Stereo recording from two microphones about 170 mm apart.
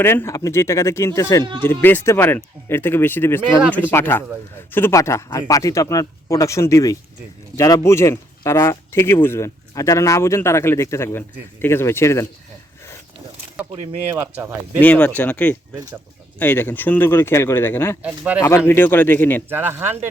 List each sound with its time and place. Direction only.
0.0 s speech: 15° left (ahead or behind)
14.2 s speech: 10° right (ahead or behind)
14.8 s speech: 10° left (ahead or behind)
18.0 s speech: 10° right (ahead or behind)
18.4 s speech: 15° left (ahead or behind)
19.5 s speech: 10° right (ahead or behind)